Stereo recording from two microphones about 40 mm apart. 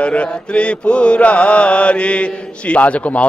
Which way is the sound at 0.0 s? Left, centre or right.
Left.